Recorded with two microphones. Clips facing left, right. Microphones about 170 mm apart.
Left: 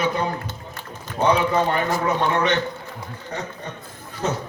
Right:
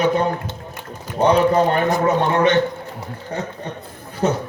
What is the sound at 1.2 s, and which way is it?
Speech, 35° right (ahead or behind).